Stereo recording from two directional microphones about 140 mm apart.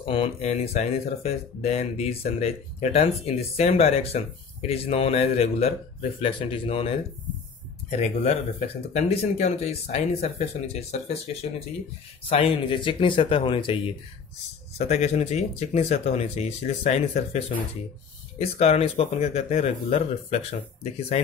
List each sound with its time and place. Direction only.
0.0 s speech: 40° left (ahead or behind)
7.9 s speech: 50° left (ahead or behind)
12.3 s speech: 40° left (ahead or behind)
14.9 s speech: 50° left (ahead or behind)
18.4 s speech: 45° left (ahead or behind)